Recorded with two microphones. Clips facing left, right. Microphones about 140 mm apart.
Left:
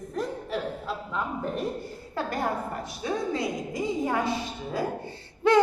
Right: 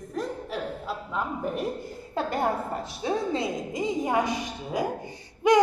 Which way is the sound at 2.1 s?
25° right (ahead or behind).